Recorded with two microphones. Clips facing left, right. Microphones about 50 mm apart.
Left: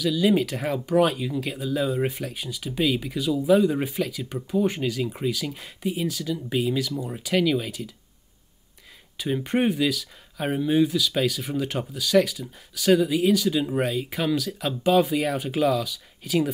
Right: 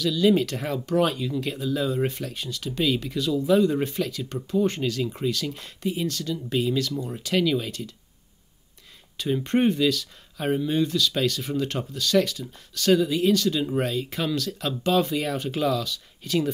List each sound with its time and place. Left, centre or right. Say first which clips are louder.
0.0 s speech: right 1 dB; centre
9.2 s speech: right 1 dB; centre